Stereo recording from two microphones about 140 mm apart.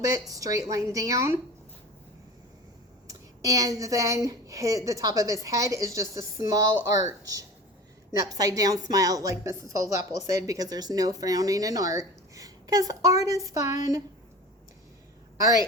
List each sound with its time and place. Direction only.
0.0 s a woman's voice: 25° right (ahead or behind)
3.1 s a woman's voice: 25° right (ahead or behind)
15.4 s a woman's voice: 25° right (ahead or behind)